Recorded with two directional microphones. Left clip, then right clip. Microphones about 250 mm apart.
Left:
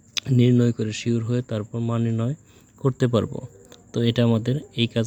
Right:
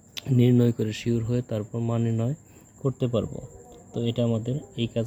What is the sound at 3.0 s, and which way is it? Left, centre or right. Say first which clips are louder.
Speech: left 5 dB; left.